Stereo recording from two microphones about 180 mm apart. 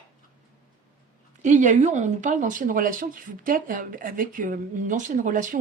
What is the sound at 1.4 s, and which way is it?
Speech, 45° right (ahead or behind).